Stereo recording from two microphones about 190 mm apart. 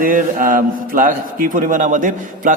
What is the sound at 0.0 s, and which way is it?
A man's voice, 45° right (ahead or behind).